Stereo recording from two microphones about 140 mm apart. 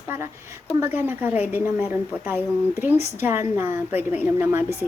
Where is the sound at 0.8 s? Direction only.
15° right (ahead or behind).